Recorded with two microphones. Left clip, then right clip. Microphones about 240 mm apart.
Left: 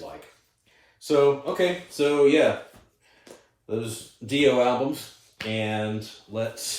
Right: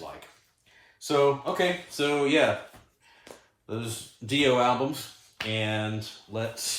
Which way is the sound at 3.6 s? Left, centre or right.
Centre.